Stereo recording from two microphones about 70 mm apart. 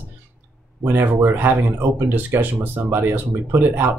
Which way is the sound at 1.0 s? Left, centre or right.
Right.